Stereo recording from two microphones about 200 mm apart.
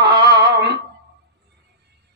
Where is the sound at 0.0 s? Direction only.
55° right (ahead or behind).